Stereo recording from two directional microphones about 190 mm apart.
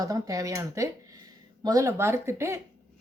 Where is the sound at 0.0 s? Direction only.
20° right (ahead or behind).